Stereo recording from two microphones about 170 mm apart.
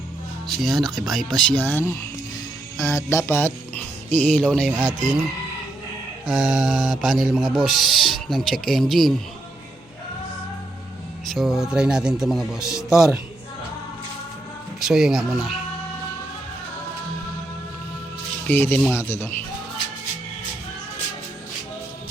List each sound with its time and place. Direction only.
0.6 s a man's voice: centre (ahead or behind)
4.7 s speech: 20° right (ahead or behind)
6.2 s a man's voice: centre (ahead or behind)
11.3 s a man's voice: centre (ahead or behind)
14.8 s a man's voice: centre (ahead or behind)
18.4 s speech: 15° left (ahead or behind)